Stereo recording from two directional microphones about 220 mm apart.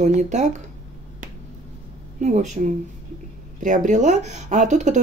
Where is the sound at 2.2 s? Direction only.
35° right (ahead or behind).